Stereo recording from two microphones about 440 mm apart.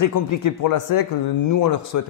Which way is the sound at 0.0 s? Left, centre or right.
Left.